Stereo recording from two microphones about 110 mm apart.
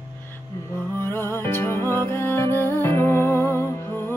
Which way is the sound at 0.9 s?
20° left (ahead or behind).